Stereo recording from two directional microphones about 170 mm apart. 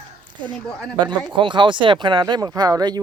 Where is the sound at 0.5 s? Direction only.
5° left (ahead or behind).